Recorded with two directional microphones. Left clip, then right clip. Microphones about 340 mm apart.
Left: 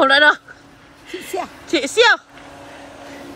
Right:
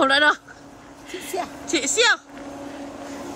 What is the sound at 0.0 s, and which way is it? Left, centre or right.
Speech, centre.